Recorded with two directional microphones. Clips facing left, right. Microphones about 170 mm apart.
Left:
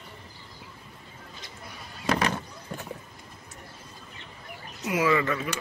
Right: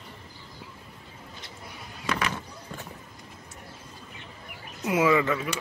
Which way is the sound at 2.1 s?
35° left (ahead or behind).